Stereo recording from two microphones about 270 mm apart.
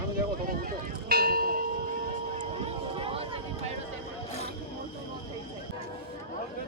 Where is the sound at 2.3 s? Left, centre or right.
Right.